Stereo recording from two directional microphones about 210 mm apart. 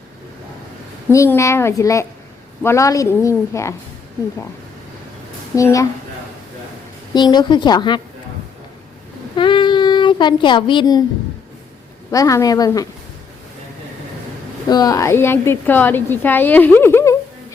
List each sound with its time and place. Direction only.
1.1 s a woman's voice: 15° left (ahead or behind)
5.5 s a woman's voice: 15° left (ahead or behind)
7.1 s speech: 20° left (ahead or behind)
9.3 s child singing: 25° left (ahead or behind)
12.1 s a woman's voice: 15° left (ahead or behind)
14.7 s a woman's voice: 20° left (ahead or behind)